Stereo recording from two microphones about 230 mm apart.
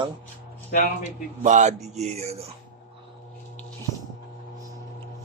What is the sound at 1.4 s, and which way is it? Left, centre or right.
A man's voice, right.